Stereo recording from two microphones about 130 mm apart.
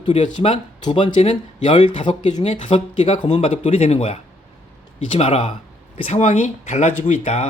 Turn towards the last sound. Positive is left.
turn(degrees=55)  # may be behind; listen again after turning